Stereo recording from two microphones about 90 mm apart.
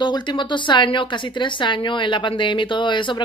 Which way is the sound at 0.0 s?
55° left (ahead or behind).